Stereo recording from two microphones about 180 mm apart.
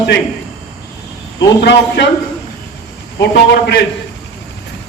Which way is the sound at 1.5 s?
70° left (ahead or behind).